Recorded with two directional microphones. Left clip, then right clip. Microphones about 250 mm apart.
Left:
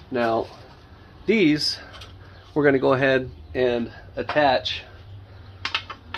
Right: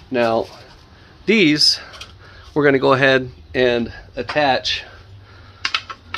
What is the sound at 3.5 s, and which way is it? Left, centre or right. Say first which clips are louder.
Speech: right 6 dB; right.